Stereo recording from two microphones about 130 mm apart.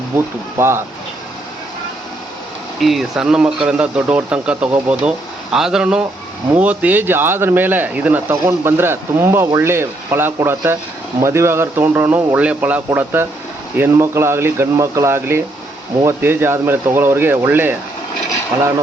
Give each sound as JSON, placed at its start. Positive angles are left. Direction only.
{"t": 0.5, "sound": "speech", "side_deg": -20}
{"t": 2.8, "sound": "speech", "side_deg": 0}